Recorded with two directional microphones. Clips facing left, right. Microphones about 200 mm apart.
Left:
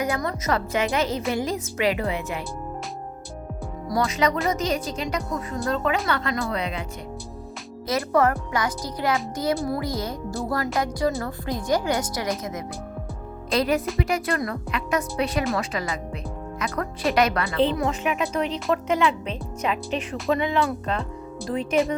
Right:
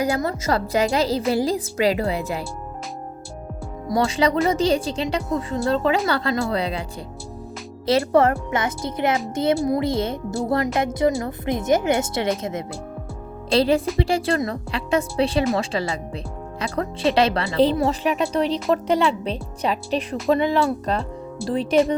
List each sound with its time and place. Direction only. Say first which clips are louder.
0.0 s speech: right 4 dB; 30° right (ahead or behind)
3.8 s speech: right 3 dB; 25° right (ahead or behind)
7.9 s speech: right 4 dB; 30° right (ahead or behind)